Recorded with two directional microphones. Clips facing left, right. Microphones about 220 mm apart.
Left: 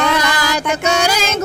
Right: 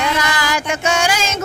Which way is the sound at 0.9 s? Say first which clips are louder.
Left 1 dB; 40° left (ahead or behind).